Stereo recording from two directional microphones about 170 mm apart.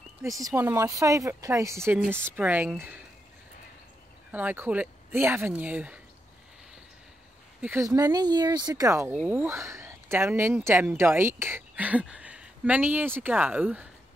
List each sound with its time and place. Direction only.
0.4 s speech: 15° right (ahead or behind)
4.3 s speech: 10° right (ahead or behind)
7.6 s speech: 15° right (ahead or behind)